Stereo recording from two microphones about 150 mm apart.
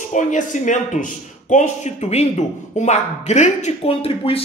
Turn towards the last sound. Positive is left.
turn(degrees=40)  # may be behind; listen again after turning